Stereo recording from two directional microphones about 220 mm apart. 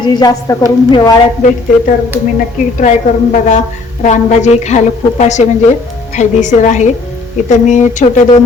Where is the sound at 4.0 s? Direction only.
30° left (ahead or behind).